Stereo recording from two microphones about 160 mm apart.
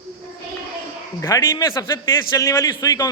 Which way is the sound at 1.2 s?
20° left (ahead or behind).